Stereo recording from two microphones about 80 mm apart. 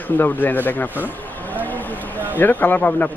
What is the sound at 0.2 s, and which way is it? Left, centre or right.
Speech, left.